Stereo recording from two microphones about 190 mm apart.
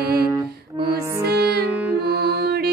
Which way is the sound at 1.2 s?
60° right (ahead or behind).